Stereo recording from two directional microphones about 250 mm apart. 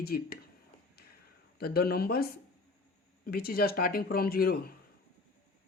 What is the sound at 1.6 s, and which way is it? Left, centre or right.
Speech, left.